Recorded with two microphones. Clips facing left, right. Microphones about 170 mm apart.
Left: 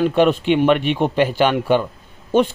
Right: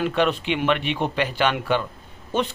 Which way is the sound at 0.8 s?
45° left (ahead or behind).